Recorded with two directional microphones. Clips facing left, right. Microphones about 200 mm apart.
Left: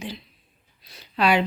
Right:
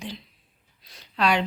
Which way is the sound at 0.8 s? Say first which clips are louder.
Left 2 dB; 5° left (ahead or behind).